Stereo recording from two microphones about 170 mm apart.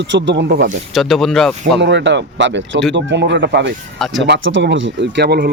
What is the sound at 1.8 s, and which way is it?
Speech, 90° right.